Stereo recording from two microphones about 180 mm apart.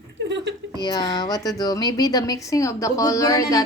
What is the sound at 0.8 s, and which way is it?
A woman's voice, 25° left (ahead or behind).